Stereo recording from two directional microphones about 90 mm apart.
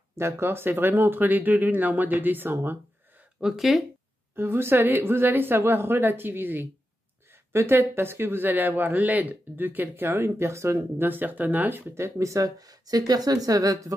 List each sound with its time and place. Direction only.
0.1 s speech: 30° right (ahead or behind)
3.3 s speech: 5° right (ahead or behind)
4.4 s speech: 25° right (ahead or behind)